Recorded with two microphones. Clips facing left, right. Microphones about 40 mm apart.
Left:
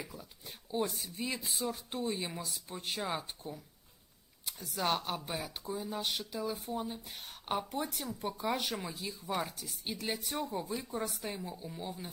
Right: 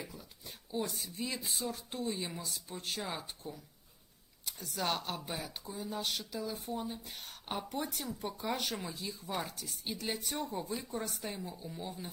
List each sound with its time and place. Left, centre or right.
0.1 s a sound: centre
0.7 s speech: centre
0.9 s speech: centre
4.5 s speech: centre